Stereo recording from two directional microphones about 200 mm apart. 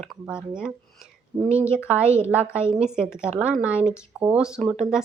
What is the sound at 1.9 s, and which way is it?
Speech, 5° right (ahead or behind).